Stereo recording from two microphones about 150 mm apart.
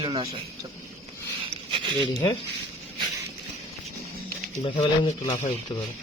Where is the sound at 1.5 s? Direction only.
35° right (ahead or behind).